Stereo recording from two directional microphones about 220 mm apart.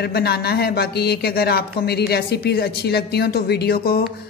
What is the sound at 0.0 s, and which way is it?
Speech, 45° left (ahead or behind).